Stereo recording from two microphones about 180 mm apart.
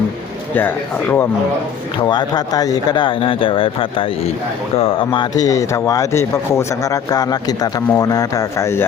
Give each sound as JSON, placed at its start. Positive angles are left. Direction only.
{"t": 0.5, "sound": "speech", "side_deg": 10}
{"t": 2.0, "sound": "a man's voice", "side_deg": 25}